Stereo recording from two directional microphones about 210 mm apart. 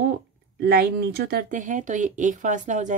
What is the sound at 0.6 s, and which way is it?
Speech, 45° right (ahead or behind).